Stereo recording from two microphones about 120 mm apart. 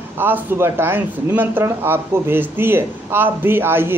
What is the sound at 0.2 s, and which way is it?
Speech, 20° right (ahead or behind).